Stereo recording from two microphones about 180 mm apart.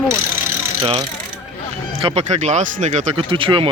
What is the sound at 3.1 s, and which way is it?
Speech, 30° right (ahead or behind).